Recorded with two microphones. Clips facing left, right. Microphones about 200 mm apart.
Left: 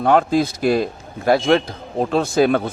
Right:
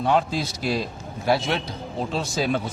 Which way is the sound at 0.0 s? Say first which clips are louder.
Left 7 dB; 55° left (ahead or behind).